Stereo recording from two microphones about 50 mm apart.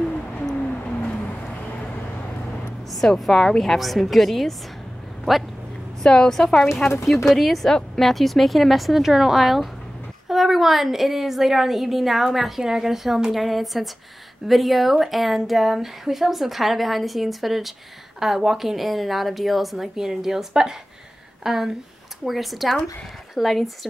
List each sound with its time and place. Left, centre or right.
1.2 s a sound: left
2.9 s a woman's voice: centre
6.0 s a woman's voice: centre